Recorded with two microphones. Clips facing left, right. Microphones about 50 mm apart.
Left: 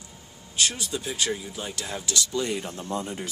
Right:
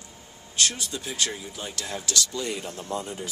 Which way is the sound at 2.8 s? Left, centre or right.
Left.